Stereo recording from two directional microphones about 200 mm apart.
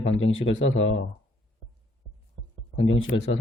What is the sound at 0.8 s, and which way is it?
Speech, 60° left (ahead or behind).